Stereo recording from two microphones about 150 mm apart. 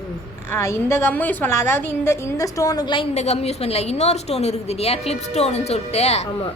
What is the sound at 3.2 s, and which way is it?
A woman's voice, 45° left (ahead or behind).